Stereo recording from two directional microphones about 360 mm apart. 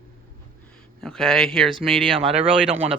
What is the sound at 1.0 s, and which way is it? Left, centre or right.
Speech, centre.